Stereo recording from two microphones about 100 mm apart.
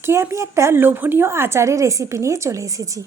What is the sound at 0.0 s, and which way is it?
A woman's voice, 25° right (ahead or behind).